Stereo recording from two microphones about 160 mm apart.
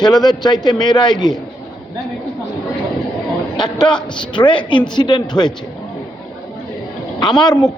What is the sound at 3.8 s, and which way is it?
A man's voice, 30° left (ahead or behind).